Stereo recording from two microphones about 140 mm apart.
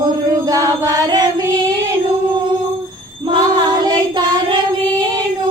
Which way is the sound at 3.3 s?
30° right (ahead or behind).